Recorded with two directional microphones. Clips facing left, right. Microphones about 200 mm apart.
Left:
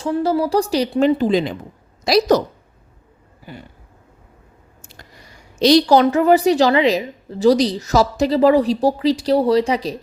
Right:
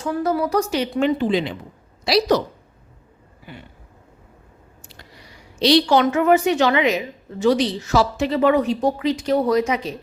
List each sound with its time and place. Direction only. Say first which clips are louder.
0.0 s a woman's voice: left 3 dB; 30° left (ahead or behind); by 2.4 s 45° left (ahead or behind)
3.5 s a sound: left 3 dB; 40° left (ahead or behind)
4.8 s a woman's voice: left 1 dB; 45° left (ahead or behind)